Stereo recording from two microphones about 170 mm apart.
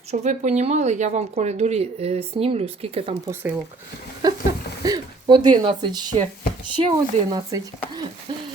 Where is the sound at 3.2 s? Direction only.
10° right (ahead or behind).